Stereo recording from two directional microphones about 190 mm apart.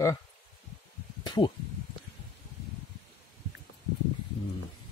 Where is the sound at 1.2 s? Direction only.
25° left (ahead or behind).